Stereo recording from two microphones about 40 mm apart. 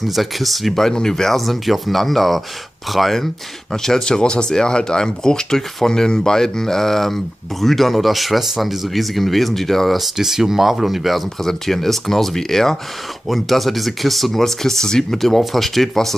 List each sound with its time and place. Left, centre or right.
0.1 s speech: centre
11.4 s speech: centre